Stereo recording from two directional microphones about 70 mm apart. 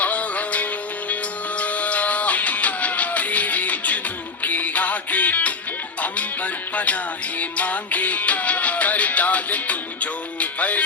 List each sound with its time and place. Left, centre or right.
0.0 s music: left